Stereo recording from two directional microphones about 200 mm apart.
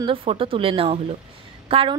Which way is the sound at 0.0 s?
25° right (ahead or behind).